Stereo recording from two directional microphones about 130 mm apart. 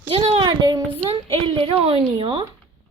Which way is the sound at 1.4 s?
45° right (ahead or behind).